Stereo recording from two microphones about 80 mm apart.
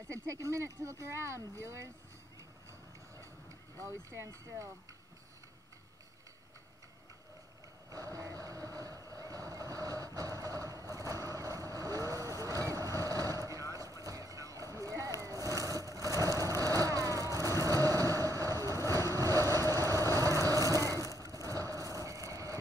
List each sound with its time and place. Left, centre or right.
0.1 s speech: right
3.8 s speech: right
7.9 s boat: right
13.5 s vehicle: right
21.5 s a sound: right